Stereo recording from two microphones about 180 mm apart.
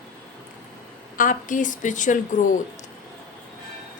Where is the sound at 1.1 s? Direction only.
45° left (ahead or behind).